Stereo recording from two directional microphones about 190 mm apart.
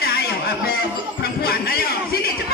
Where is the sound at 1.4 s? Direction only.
55° left (ahead or behind).